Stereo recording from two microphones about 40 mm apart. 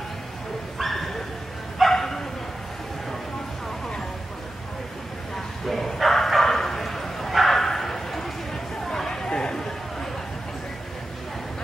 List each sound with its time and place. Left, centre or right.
0.7 s bow-wow: centre
5.3 s bow-wow: centre
8.8 s chatter: centre